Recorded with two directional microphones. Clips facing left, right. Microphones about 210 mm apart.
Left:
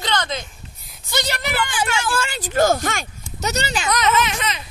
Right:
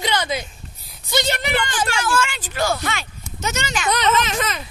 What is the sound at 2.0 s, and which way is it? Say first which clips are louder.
Speech: right 2 dB; 35° left (ahead or behind).